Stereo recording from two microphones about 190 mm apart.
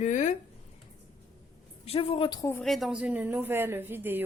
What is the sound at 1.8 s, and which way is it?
Speech, 30° left (ahead or behind).